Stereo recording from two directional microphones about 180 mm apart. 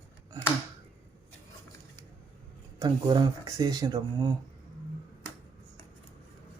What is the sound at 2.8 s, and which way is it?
Speech, 20° right (ahead or behind).